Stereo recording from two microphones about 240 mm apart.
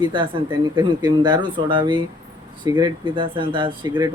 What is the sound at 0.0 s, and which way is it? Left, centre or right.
Speech, centre.